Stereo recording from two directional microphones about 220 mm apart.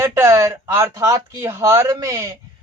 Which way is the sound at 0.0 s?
10° right (ahead or behind).